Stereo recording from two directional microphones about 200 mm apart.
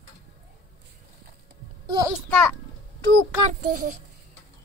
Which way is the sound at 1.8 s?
20° right (ahead or behind).